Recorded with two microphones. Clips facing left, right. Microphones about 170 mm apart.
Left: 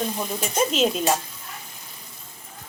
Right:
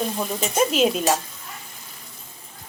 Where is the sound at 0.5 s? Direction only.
5° right (ahead or behind).